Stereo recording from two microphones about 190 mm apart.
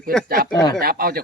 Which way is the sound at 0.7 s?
50° right (ahead or behind).